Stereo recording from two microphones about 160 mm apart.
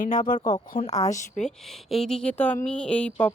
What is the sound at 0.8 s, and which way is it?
Speech, 45° left (ahead or behind).